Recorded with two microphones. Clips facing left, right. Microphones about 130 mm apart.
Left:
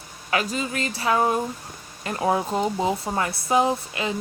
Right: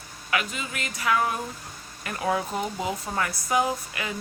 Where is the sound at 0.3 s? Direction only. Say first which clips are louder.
Left 4 dB; 35° left (ahead or behind).